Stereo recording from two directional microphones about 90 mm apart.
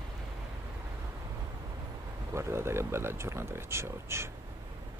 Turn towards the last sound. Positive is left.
turn(degrees=-30)  # may be behind; listen again after turning